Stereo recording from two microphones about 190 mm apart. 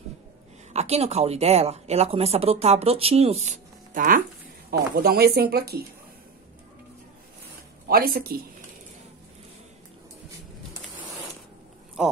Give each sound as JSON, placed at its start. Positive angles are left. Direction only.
{"t": 0.7, "sound": "speech", "side_deg": -35}
{"t": 7.9, "sound": "speech", "side_deg": -50}